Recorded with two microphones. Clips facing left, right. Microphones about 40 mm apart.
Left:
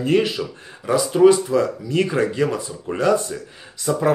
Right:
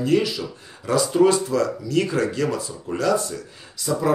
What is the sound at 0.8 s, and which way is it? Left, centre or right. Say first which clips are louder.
Speech: left 3 dB; centre.